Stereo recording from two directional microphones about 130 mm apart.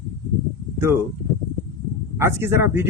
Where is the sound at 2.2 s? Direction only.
20° right (ahead or behind).